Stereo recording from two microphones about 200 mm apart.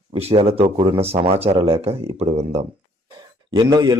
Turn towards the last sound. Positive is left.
turn(degrees=-20)  # may be behind; listen again after turning